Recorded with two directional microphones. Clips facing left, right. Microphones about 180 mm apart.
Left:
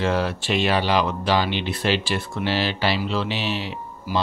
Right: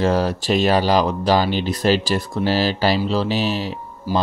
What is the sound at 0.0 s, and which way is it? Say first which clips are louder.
Speech: right 4 dB; 40° right (ahead or behind).